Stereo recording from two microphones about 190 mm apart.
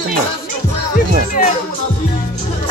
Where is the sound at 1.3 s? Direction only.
40° left (ahead or behind).